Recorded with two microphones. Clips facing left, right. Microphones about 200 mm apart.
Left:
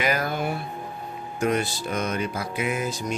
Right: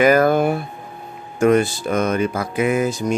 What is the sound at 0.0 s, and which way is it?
Speech, 50° right (ahead or behind).